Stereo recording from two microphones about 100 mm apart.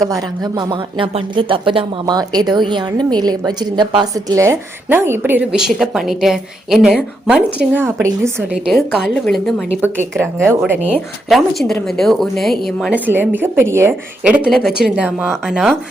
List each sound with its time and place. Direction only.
0.0 s a woman's voice: 40° right (ahead or behind); by 1.9 s 60° right (ahead or behind)
2.0 s a woman's voice: 45° right (ahead or behind); by 5.5 s 20° right (ahead or behind)
5.5 s a woman's voice: 5° right (ahead or behind)
7.7 s a woman's voice: 20° right (ahead or behind)
9.0 s a woman's voice: 5° left (ahead or behind)
9.8 s a woman's voice: 25° right (ahead or behind)
11.3 s a woman's voice: centre (ahead or behind)
12.9 s a woman's voice: 20° right (ahead or behind)
14.3 s a woman's voice: 15° right (ahead or behind)